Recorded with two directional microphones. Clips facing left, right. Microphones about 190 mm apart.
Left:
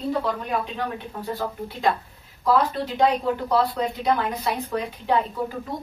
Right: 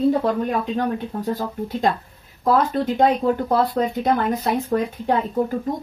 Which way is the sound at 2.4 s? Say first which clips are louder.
Right 3 dB; 50° right (ahead or behind).